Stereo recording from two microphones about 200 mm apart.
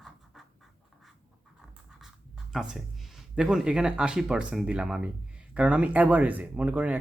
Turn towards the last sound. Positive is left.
turn(degrees=-5)  # may be behind; listen again after turning